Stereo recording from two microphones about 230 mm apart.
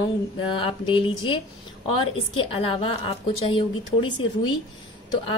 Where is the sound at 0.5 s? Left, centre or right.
Left.